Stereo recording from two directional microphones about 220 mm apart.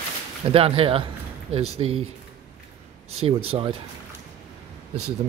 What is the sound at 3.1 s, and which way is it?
Speech, 25° right (ahead or behind).